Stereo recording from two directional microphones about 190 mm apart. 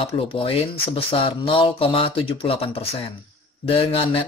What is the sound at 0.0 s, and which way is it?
Speech, 30° left (ahead or behind).